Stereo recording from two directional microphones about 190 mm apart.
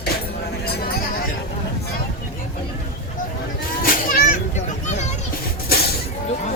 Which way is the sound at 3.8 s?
45° left (ahead or behind).